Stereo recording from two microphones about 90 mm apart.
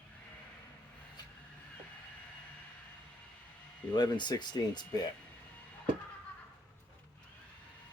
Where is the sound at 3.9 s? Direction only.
55° left (ahead or behind).